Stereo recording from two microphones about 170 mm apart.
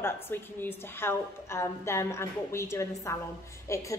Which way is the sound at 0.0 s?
10° left (ahead or behind).